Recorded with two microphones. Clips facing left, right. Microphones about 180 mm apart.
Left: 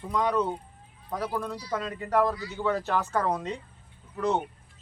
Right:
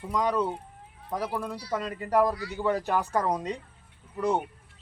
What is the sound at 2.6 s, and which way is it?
A man's voice, 15° right (ahead or behind).